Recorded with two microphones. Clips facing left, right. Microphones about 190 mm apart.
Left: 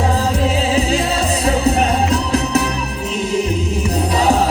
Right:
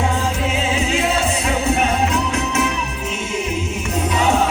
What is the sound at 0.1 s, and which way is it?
Music, 35° left (ahead or behind).